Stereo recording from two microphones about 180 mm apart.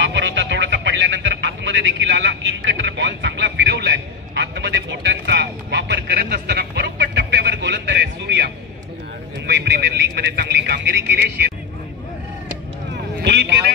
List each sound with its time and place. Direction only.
0.0 s music: 85° right
9.5 s a man's voice: 70° right (ahead or behind)
12.9 s a sound: 70° right (ahead or behind)